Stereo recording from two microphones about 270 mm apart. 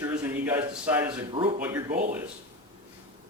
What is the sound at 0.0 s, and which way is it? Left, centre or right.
Speech, centre.